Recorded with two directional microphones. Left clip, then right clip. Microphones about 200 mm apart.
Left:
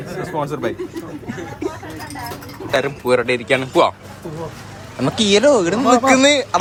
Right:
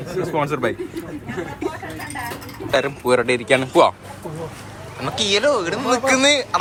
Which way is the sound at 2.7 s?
10° left (ahead or behind).